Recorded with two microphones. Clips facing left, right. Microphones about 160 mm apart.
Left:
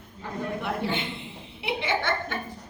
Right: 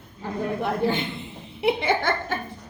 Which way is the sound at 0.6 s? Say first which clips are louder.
Right 6 dB; 40° right (ahead or behind).